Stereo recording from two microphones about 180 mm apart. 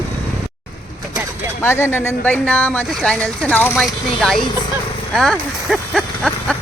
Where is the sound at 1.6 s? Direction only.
15° left (ahead or behind).